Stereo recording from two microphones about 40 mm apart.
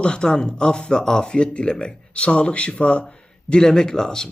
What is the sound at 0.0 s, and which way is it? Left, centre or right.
A man's voice, left.